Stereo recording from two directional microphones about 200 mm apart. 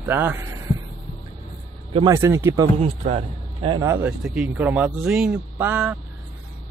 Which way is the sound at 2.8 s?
30° right (ahead or behind).